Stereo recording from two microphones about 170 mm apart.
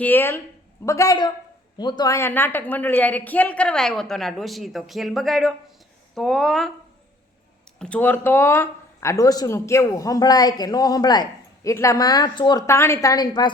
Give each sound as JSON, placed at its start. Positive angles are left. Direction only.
{"t": 0.0, "sound": "a woman's voice", "side_deg": 10}
{"t": 7.8, "sound": "speech", "side_deg": 10}